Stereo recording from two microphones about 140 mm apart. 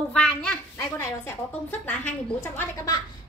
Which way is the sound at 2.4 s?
20° left (ahead or behind).